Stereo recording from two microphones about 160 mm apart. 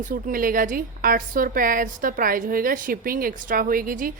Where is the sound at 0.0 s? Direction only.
60° right (ahead or behind).